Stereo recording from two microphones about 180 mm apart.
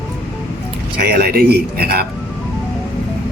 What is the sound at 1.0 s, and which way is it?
Speech, 60° right (ahead or behind).